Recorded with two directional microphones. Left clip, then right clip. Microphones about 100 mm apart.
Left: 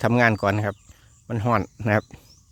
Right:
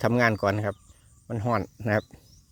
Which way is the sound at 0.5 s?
40° left (ahead or behind).